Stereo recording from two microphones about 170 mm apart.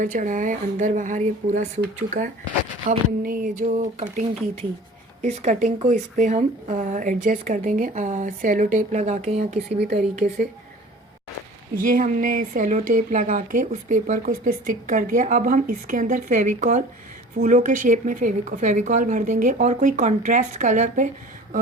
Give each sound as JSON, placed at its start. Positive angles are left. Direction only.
{"t": 0.0, "sound": "speech", "side_deg": -50}
{"t": 5.2, "sound": "speech", "side_deg": -45}
{"t": 9.7, "sound": "a woman's voice", "side_deg": -75}
{"t": 10.2, "sound": "speech", "side_deg": -40}
{"t": 11.8, "sound": "speech", "side_deg": -55}